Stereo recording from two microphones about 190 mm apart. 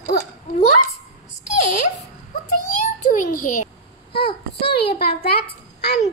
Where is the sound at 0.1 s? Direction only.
55° left (ahead or behind).